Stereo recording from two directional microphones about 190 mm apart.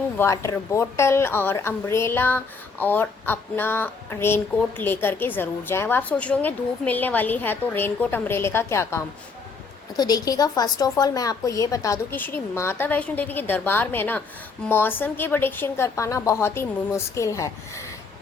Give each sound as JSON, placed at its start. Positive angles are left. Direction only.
{"t": 0.2, "sound": "a woman's voice", "side_deg": 15}
{"t": 10.0, "sound": "a woman's voice", "side_deg": 20}